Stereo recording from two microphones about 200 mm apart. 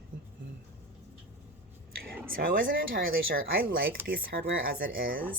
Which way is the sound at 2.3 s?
45° right (ahead or behind).